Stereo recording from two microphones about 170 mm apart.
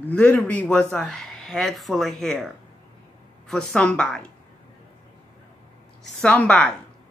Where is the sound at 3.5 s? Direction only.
5° left (ahead or behind).